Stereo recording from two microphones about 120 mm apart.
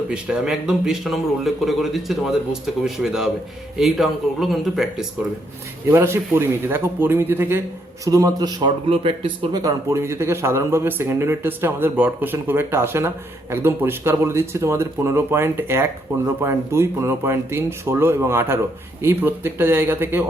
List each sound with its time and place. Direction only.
0.1 s a man's voice: 5° right (ahead or behind)
5.9 s speech: 20° right (ahead or behind)
8.0 s a man's voice: 30° right (ahead or behind)
8.9 s speech: 50° right (ahead or behind)
9.9 s speech: 20° right (ahead or behind)